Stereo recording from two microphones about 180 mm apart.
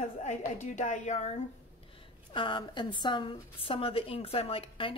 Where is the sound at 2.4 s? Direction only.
25° left (ahead or behind).